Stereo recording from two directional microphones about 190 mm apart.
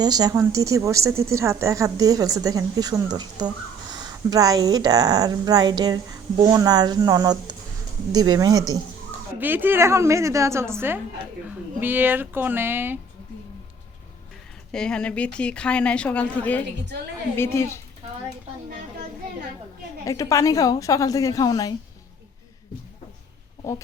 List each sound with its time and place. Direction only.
0.0 s speech: 20° right (ahead or behind)
14.7 s a woman's voice: 5° left (ahead or behind)
20.1 s a woman's voice: 15° left (ahead or behind)